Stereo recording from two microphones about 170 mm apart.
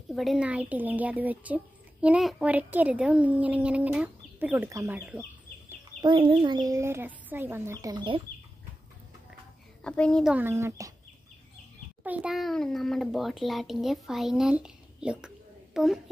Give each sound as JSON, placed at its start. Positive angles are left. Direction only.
{"t": 0.1, "sound": "speech", "side_deg": 0}
{"t": 5.9, "sound": "speech", "side_deg": -30}
{"t": 9.8, "sound": "a child's voice", "side_deg": 5}
{"t": 10.3, "sound": "speech", "side_deg": -15}
{"t": 12.0, "sound": "a child's voice", "side_deg": -5}